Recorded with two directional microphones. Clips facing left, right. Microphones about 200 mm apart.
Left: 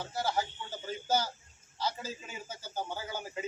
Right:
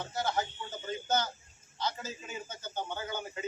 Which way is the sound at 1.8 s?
5° left (ahead or behind).